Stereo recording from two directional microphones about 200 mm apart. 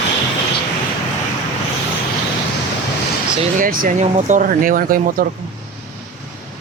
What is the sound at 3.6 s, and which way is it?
Speech, 45° right (ahead or behind).